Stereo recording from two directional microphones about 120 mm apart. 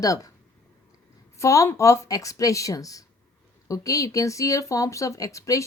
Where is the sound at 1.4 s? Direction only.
25° left (ahead or behind).